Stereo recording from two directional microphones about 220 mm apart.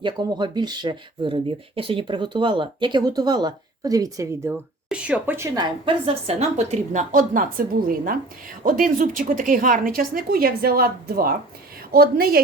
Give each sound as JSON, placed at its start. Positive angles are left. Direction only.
{"t": 0.0, "sound": "speech", "side_deg": -20}
{"t": 5.8, "sound": "a woman's voice", "side_deg": -25}